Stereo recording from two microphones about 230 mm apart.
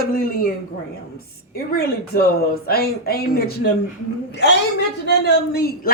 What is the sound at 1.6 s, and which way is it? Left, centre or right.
Speech, left.